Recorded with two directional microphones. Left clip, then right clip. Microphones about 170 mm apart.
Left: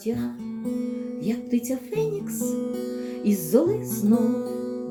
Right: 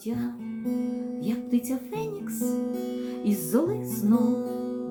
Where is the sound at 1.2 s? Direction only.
Centre (ahead or behind).